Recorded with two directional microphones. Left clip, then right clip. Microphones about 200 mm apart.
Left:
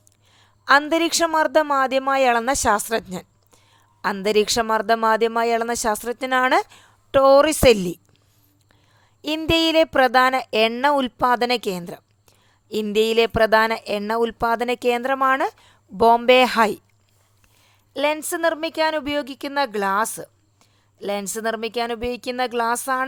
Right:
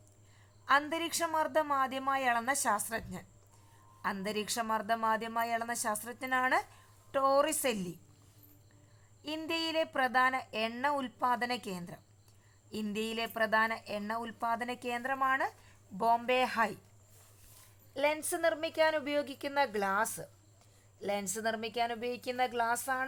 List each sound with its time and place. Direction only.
0.3 s a woman's voice: 45° left (ahead or behind)
9.2 s speech: 50° left (ahead or behind)
17.9 s a woman's voice: 30° left (ahead or behind)